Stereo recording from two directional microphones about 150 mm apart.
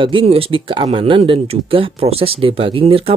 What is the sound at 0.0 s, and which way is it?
Speech, 35° right (ahead or behind).